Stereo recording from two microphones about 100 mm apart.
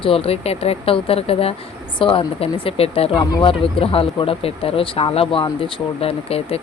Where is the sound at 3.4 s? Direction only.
65° left (ahead or behind).